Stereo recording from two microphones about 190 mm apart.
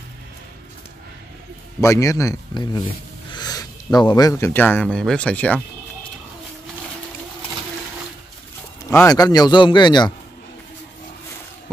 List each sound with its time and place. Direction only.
1.8 s speech: 15° left (ahead or behind)
8.9 s a man's voice: 20° left (ahead or behind)